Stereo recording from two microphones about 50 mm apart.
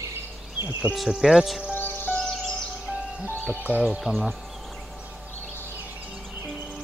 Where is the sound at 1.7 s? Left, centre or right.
Left.